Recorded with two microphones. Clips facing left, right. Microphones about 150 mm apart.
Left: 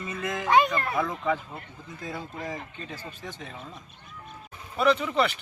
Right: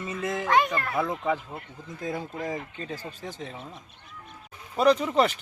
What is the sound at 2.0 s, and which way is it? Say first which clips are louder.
Speech: right 4 dB; 45° right (ahead or behind).